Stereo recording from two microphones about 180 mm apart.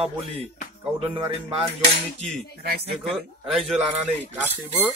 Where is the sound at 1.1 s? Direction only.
30° right (ahead or behind).